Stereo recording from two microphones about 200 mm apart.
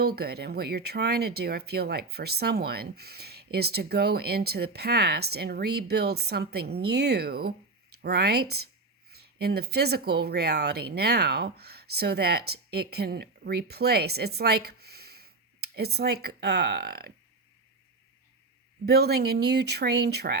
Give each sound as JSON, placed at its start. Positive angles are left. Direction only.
{"t": 0.2, "sound": "speech", "side_deg": -55}
{"t": 18.9, "sound": "speech", "side_deg": -55}